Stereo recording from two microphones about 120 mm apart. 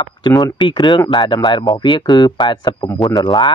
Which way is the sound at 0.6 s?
45° left (ahead or behind).